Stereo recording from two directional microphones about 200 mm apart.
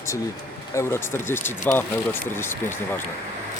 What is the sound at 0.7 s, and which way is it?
Speech, 10° left (ahead or behind).